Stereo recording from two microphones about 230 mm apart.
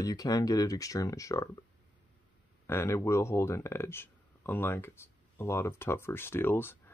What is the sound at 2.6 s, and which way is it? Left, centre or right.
Speech, centre.